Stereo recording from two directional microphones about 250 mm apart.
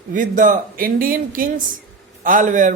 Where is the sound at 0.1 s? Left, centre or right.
Right.